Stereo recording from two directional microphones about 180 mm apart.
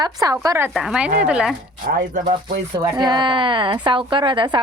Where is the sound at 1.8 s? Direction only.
50° right (ahead or behind).